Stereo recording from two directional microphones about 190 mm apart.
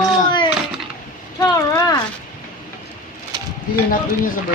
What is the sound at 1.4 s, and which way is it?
Vehicle, 20° left (ahead or behind).